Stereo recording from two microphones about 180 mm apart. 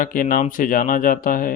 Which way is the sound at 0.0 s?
50° left (ahead or behind).